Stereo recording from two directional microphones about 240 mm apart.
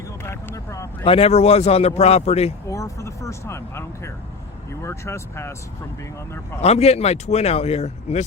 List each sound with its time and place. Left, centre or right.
0.3 s vehicle: centre
1.0 s speech: left
2.6 s speech: centre
6.6 s speech: left